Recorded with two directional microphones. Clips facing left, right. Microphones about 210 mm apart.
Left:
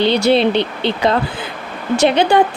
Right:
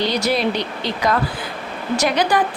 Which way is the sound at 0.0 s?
25° left (ahead or behind).